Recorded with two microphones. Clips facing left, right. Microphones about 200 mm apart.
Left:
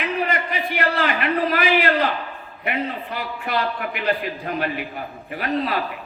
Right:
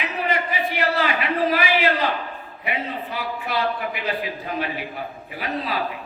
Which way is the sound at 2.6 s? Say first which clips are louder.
Left 2 dB; 50° left (ahead or behind).